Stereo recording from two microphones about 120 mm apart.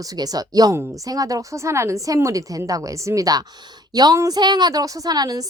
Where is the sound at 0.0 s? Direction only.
30° right (ahead or behind).